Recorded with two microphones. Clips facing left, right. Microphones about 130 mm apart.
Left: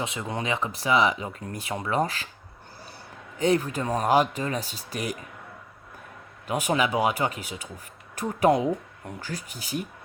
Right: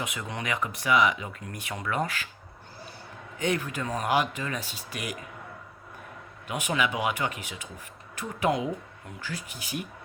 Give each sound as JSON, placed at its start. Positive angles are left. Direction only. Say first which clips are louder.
{"t": 0.0, "sound": "speech", "louder": "left 4 dB", "side_deg": 30}
{"t": 3.3, "sound": "speech", "louder": "left 5 dB", "side_deg": 35}
{"t": 6.5, "sound": "speech", "louder": "left 4 dB", "side_deg": 35}